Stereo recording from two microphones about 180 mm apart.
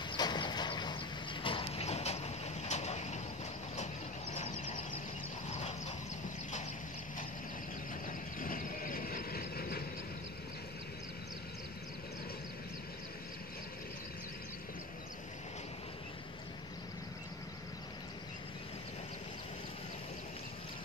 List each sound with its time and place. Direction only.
0.1 s a sound: 25° left (ahead or behind)
5.5 s vehicle: 35° left (ahead or behind)
8.4 s vehicle: 50° left (ahead or behind)